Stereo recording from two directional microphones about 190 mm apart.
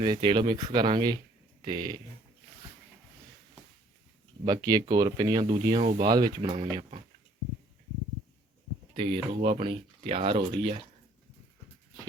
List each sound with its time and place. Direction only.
0.0 s speech: 25° right (ahead or behind)
4.4 s speech: 20° right (ahead or behind)
9.0 s speech: 30° right (ahead or behind)